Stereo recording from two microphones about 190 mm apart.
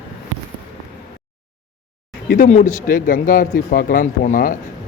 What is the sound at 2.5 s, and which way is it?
Speech, 40° left (ahead or behind).